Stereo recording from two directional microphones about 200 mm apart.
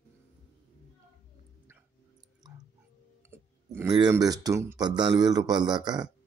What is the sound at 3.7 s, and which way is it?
Speech, 15° right (ahead or behind).